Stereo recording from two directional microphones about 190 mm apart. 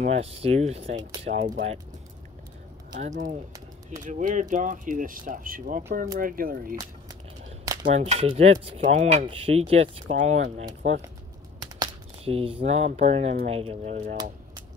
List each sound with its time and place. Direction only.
0.0 s speech: 35° right (ahead or behind)
2.9 s speech: 40° right (ahead or behind)
7.8 s speech: 35° right (ahead or behind)
11.6 s speech: 25° right (ahead or behind)